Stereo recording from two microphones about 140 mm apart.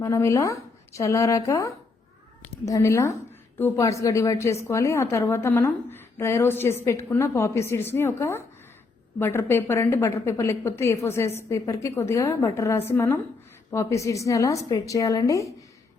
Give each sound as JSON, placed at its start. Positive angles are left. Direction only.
{"t": 0.0, "sound": "a woman's voice", "side_deg": 20}